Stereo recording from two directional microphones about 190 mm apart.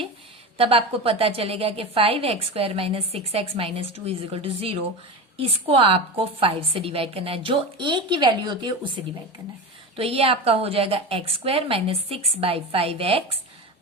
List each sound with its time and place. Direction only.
0.5 s a woman's voice: 30° right (ahead or behind)
9.9 s a woman's voice: 30° right (ahead or behind)